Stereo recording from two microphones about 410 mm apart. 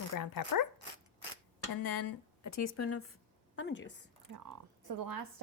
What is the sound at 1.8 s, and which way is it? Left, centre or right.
A woman's voice, left.